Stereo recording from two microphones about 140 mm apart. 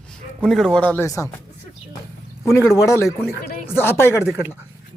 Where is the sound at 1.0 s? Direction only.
20° left (ahead or behind).